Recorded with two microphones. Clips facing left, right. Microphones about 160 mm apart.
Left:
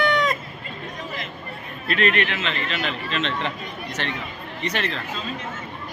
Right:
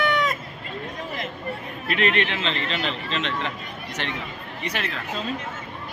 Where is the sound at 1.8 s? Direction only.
20° right (ahead or behind).